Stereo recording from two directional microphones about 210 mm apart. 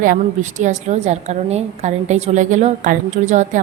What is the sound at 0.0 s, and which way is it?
A woman's voice, 40° right (ahead or behind).